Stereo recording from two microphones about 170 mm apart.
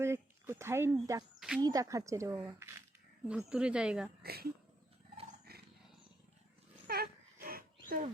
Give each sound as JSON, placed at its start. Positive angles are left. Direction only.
{"t": 0.0, "sound": "a sound", "side_deg": -15}
{"t": 1.4, "sound": "speech", "side_deg": -5}
{"t": 1.6, "sound": "speech", "side_deg": -20}
{"t": 4.2, "sound": "speech", "side_deg": -65}
{"t": 5.5, "sound": "roaring cats", "side_deg": -65}
{"t": 6.8, "sound": "dog", "side_deg": -65}